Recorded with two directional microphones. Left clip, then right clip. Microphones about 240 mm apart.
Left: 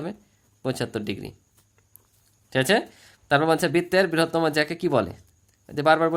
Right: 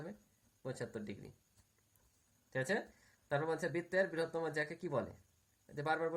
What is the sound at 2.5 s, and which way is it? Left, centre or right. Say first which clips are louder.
Speech: left 17 dB; left.